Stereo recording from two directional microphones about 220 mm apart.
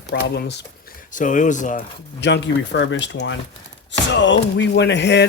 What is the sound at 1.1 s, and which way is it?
Speech, 35° left (ahead or behind).